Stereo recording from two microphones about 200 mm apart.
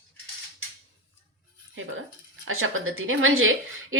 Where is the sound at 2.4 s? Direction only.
90° right.